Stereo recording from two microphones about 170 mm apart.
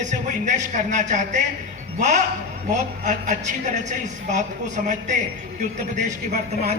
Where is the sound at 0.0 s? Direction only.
45° right (ahead or behind).